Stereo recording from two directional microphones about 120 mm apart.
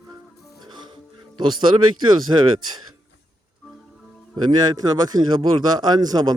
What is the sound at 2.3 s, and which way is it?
Speech, 35° right (ahead or behind).